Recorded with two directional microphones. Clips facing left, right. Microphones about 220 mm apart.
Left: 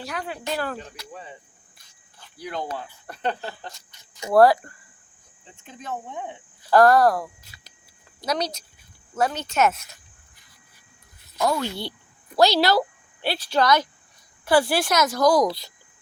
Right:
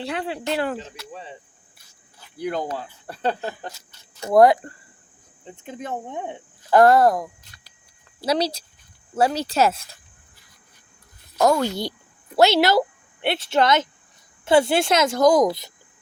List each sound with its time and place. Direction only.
0.0 s a woman's voice: 30° right (ahead or behind)
2.4 s speech: 45° right (ahead or behind)
3.1 s speech: 35° right (ahead or behind)
4.4 s a woman's voice: 20° right (ahead or behind)
5.6 s speech: 55° right (ahead or behind)
6.7 s a woman's voice: 20° right (ahead or behind)
11.3 s speech: 45° right (ahead or behind)
12.4 s a woman's voice: 20° right (ahead or behind)